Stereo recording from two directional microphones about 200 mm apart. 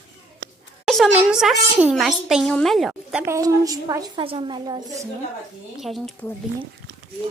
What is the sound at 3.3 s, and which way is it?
A woman's voice, 15° right (ahead or behind).